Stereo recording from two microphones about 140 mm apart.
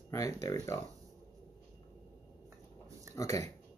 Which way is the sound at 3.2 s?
20° left (ahead or behind).